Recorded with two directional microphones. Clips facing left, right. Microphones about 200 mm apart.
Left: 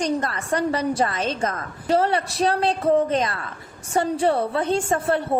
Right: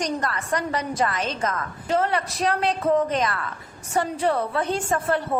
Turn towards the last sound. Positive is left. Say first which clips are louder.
# left 2 dB
turn(degrees=25)  # may be behind; listen again after turning